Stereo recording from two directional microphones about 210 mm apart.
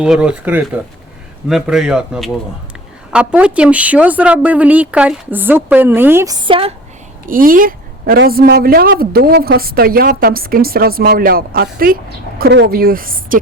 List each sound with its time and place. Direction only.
0.0 s a woman's voice: 5° right (ahead or behind); by 6.7 s 25° right (ahead or behind)
7.3 s a woman's voice: 40° right (ahead or behind)